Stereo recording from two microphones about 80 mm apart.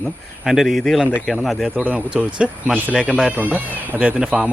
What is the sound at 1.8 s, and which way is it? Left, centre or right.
Speech, centre.